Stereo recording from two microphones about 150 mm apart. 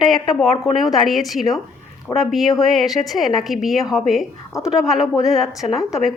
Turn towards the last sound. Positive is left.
turn(degrees=0)  # may be behind; listen again after turning